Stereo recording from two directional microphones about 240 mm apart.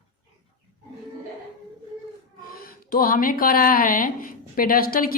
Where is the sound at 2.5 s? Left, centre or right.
Left.